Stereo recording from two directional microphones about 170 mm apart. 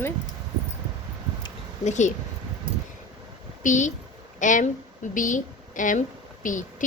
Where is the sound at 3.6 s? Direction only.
45° left (ahead or behind).